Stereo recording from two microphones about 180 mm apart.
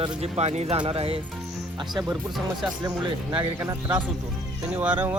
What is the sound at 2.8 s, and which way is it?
Speech, 25° right (ahead or behind).